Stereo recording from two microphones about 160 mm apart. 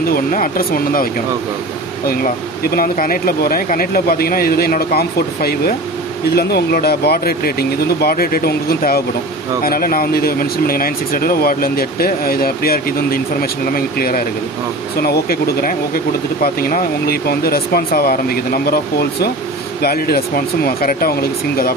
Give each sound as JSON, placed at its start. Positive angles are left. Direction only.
{"t": 0.0, "sound": "speech", "side_deg": 65}
{"t": 2.0, "sound": "speech", "side_deg": 70}